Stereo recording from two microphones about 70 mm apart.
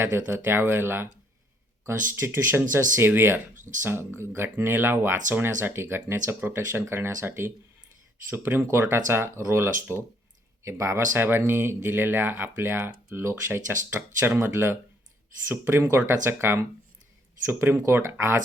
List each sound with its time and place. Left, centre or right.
0.0 s speech: right